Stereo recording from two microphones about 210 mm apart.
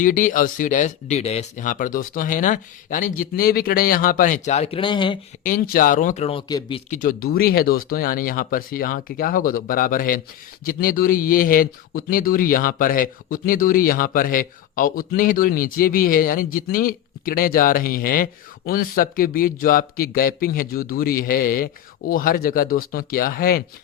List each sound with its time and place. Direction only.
0.0 s speech: 40° left (ahead or behind); by 5.2 s 25° left (ahead or behind)
5.4 s speech: 40° left (ahead or behind); by 6.8 s 25° left (ahead or behind)
6.9 s speech: 40° left (ahead or behind)